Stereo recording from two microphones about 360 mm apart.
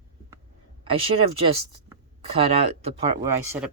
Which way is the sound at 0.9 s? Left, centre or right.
Right.